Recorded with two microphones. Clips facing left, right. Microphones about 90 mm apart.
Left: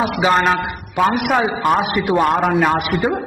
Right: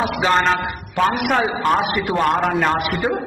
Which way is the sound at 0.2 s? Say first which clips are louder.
Left 2 dB; 5° left (ahead or behind).